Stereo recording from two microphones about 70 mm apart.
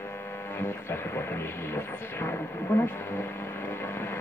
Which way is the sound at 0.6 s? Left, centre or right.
Left.